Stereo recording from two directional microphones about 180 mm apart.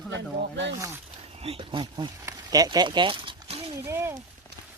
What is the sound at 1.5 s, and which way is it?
Speech, 30° right (ahead or behind).